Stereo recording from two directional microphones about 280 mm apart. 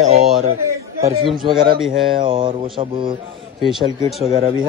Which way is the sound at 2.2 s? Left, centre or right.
Centre.